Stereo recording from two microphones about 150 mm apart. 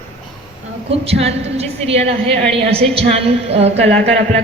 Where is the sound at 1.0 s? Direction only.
45° right (ahead or behind).